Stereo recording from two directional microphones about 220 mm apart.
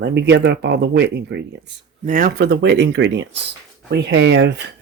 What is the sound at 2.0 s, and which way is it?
Speech, 40° right (ahead or behind).